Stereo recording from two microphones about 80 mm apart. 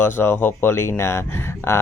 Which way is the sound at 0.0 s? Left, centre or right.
Left.